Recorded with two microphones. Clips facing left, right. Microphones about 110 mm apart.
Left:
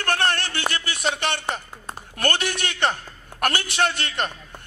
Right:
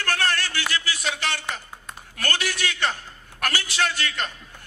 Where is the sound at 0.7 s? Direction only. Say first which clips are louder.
Left 6 dB; 55° left (ahead or behind).